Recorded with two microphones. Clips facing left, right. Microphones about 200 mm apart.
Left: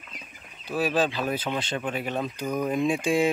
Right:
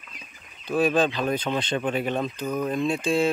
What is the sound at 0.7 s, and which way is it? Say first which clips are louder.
Speech: right 3 dB; 5° left (ahead or behind).